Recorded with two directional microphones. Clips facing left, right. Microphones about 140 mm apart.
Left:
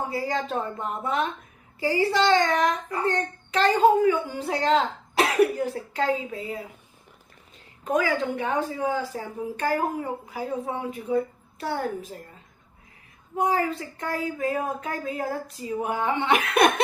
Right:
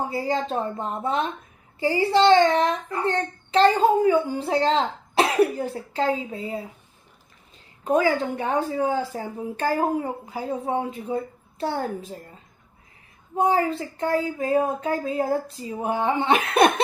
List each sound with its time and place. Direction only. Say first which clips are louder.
0.1 s a child's voice: right 2 dB; 30° right (ahead or behind)
7.9 s a woman's voice: right 3 dB; 30° right (ahead or behind)
13.3 s a child's voice: right 3 dB; 30° right (ahead or behind)